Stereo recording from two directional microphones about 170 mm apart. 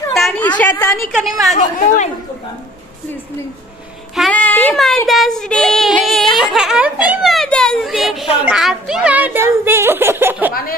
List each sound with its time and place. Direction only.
0.1 s a sound: 5° left (ahead or behind)
0.6 s a woman's voice: 15° left (ahead or behind)
1.5 s speech: 45° left (ahead or behind)
4.1 s child singing: 5° left (ahead or behind); by 10.5 s 10° right (ahead or behind)